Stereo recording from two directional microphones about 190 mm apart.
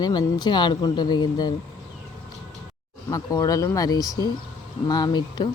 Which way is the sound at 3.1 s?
20° left (ahead or behind).